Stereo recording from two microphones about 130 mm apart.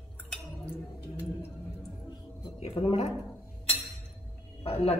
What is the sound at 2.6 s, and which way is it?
Speech, 50° left (ahead or behind).